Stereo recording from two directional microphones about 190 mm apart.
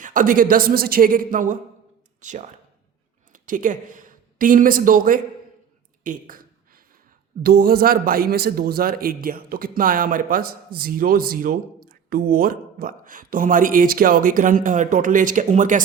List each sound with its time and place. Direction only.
0.0 s a man's voice: 45° right (ahead or behind)